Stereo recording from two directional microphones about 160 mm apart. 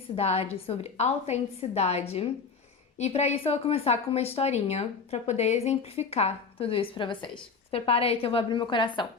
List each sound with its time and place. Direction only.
0.2 s speech: 40° left (ahead or behind)